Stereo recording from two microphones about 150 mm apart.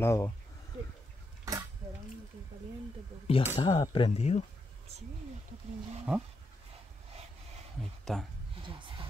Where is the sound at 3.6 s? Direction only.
35° left (ahead or behind).